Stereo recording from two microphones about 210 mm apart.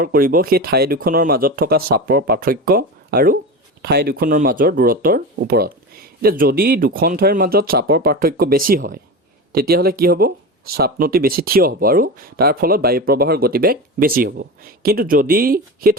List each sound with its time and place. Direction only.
0.0 s speech: 45° right (ahead or behind)